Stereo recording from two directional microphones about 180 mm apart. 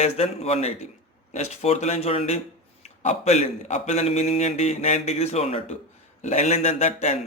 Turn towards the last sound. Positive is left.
turn(degrees=35)  # may be behind; listen again after turning